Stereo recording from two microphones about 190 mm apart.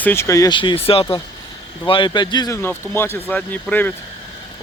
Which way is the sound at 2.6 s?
10° left (ahead or behind).